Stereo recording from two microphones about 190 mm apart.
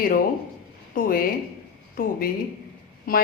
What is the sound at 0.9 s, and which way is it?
A woman's voice, 50° left (ahead or behind).